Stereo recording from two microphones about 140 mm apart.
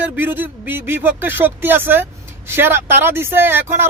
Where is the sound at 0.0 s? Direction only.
15° right (ahead or behind).